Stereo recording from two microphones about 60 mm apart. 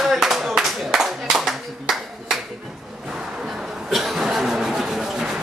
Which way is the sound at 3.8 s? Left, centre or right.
Centre.